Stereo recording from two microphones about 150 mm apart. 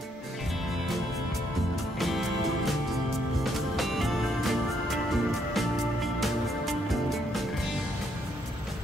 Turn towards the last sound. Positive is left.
turn(degrees=0)  # may be behind; listen again after turning